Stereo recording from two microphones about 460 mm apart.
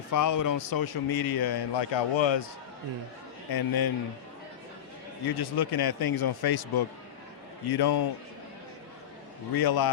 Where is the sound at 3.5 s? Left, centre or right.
Left.